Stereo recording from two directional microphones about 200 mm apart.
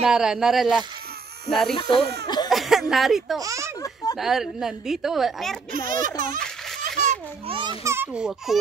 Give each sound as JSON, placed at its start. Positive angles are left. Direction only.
{"t": 0.0, "sound": "a woman's voice", "side_deg": -5}
{"t": 2.2, "sound": "a sound", "side_deg": 20}
{"t": 2.5, "sound": "speech", "side_deg": 0}
{"t": 3.3, "sound": "speech", "side_deg": -15}
{"t": 3.8, "sound": "a sound", "side_deg": 20}
{"t": 4.2, "sound": "a woman's voice", "side_deg": 0}
{"t": 5.7, "sound": "a child's voice", "side_deg": -45}
{"t": 7.5, "sound": "speech", "side_deg": -20}